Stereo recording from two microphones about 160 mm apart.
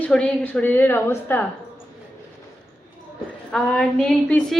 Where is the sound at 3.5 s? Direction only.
5° left (ahead or behind).